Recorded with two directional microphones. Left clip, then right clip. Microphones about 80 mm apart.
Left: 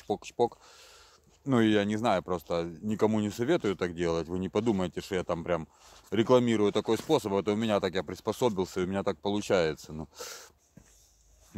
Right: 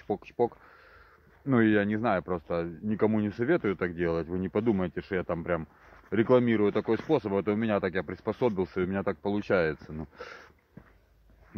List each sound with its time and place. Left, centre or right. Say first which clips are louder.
0.0 s speech: even; left